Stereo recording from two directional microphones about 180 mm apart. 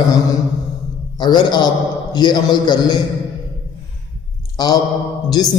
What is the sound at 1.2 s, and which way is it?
Speech, 25° left (ahead or behind).